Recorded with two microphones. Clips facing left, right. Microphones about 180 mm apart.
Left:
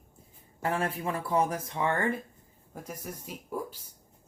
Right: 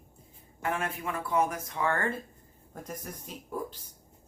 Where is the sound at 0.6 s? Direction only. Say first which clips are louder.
Left 2 dB; 35° left (ahead or behind).